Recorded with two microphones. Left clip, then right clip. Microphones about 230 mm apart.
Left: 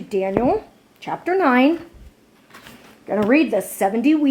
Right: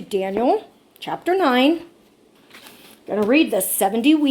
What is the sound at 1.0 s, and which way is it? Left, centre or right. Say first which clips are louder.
Speech: left 1 dB; centre.